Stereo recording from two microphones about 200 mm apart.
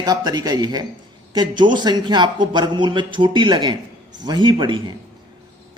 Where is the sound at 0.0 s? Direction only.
20° right (ahead or behind).